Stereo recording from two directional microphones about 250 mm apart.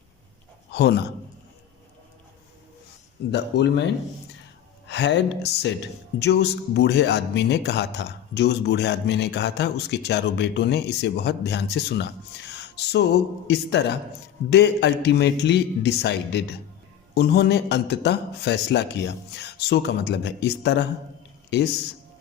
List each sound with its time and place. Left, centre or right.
0.7 s a man's voice: left
3.3 s speech: left
4.9 s speech: left
12.5 s music: left
13.5 s speech: left